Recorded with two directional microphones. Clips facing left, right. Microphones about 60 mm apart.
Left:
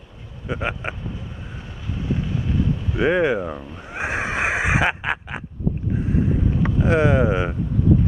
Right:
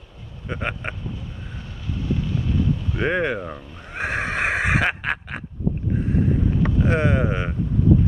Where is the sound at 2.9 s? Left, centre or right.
Centre.